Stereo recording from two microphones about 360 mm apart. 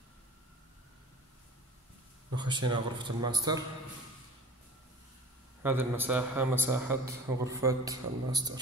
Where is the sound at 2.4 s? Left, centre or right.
Centre.